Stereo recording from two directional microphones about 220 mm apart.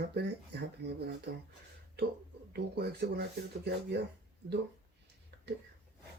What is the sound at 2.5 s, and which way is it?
Speech, 45° right (ahead or behind).